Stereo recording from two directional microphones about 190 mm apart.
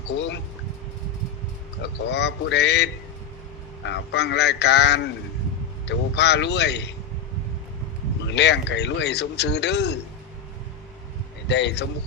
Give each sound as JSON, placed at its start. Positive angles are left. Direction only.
{"t": 0.1, "sound": "speech", "side_deg": 70}
{"t": 1.8, "sound": "a man's voice", "side_deg": 65}
{"t": 8.3, "sound": "a man's voice", "side_deg": 65}
{"t": 11.4, "sound": "a man's voice", "side_deg": 65}